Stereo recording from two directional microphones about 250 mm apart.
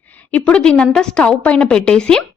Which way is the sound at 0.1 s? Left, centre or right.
Centre.